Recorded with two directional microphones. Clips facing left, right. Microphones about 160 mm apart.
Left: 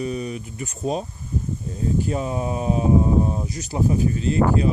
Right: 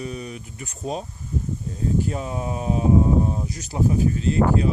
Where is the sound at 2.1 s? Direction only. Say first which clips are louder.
Left 3 dB; 10° left (ahead or behind).